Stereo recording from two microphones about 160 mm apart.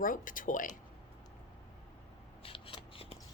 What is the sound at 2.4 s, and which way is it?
Scissors, 35° left (ahead or behind).